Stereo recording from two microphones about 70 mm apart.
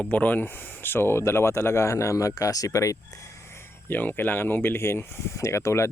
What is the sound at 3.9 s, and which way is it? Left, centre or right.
Speech, left.